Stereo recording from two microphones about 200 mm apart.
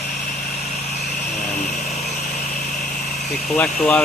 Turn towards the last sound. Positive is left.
turn(degrees=10)  # may be behind; listen again after turning